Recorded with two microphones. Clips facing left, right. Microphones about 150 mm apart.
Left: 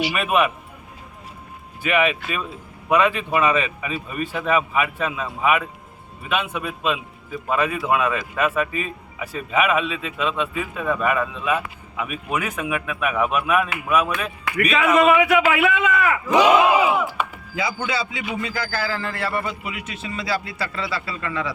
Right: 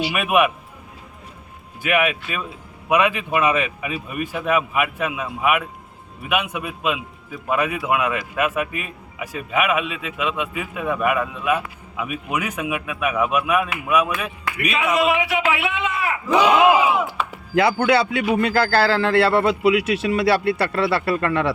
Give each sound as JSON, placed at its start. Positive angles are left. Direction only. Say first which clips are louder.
{"t": 0.1, "sound": "a man's voice", "louder": "right 2 dB", "side_deg": -10}
{"t": 1.8, "sound": "a man's voice", "louder": "even", "side_deg": -10}
{"t": 15.1, "sound": "a man's voice", "louder": "left 4 dB", "side_deg": 50}
{"t": 17.5, "sound": "a man's voice", "louder": "right 11 dB", "side_deg": -70}